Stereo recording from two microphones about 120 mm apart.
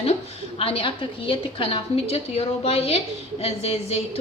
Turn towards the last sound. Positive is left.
turn(degrees=60)  # may be behind; listen again after turning